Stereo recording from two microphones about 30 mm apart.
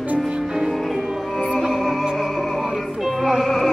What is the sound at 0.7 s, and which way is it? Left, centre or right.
Music, centre.